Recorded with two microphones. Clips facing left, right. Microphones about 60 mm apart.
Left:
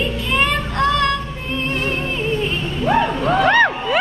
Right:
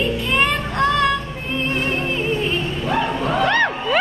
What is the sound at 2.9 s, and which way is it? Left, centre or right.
Music, left.